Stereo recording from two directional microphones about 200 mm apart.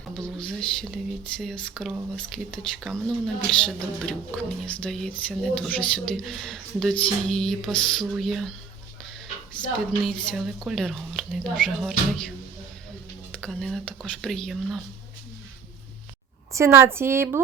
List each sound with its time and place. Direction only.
0.2 s a woman's voice: 5° left (ahead or behind)
9.6 s a woman's voice: 5° left (ahead or behind)
13.4 s a woman's voice: centre (ahead or behind)
16.5 s a woman's voice: 15° right (ahead or behind)